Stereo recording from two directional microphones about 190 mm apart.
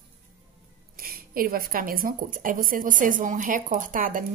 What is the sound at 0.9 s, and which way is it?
Speech, 50° right (ahead or behind).